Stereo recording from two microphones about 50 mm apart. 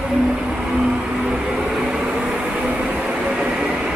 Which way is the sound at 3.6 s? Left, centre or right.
Centre.